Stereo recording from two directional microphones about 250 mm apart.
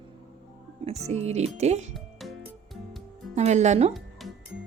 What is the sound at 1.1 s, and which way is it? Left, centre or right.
Speech, right.